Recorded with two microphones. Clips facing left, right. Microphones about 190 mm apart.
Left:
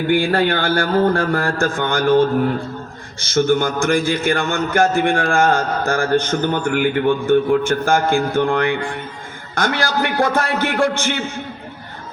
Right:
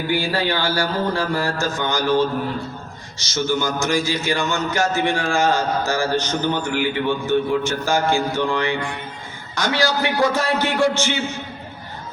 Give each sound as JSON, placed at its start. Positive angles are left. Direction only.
{"t": 0.1, "sound": "a man's voice", "side_deg": 55}